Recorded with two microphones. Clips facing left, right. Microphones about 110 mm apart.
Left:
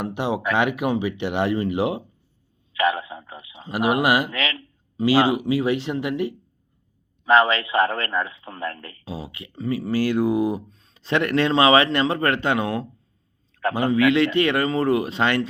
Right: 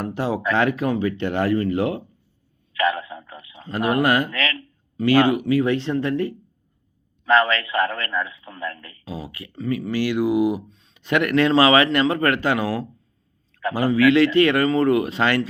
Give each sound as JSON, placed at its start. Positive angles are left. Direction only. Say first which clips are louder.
{"t": 0.0, "sound": "a man's voice", "louder": "right 1 dB", "side_deg": 20}
{"t": 2.7, "sound": "a sound", "louder": "even", "side_deg": 25}
{"t": 3.7, "sound": "speech", "louder": "even", "side_deg": 15}
{"t": 4.3, "sound": "speech", "louder": "right 1 dB", "side_deg": 30}
{"t": 7.3, "sound": "a man's voice", "louder": "left 1 dB", "side_deg": 25}